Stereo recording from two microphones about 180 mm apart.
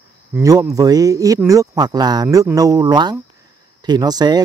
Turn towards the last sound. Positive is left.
turn(degrees=-20)  # may be behind; listen again after turning